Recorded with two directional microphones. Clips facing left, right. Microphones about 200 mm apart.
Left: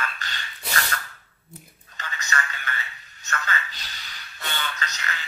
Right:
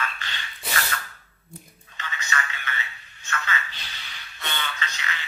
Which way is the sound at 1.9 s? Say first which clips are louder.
Left 1 dB; 40° left (ahead or behind).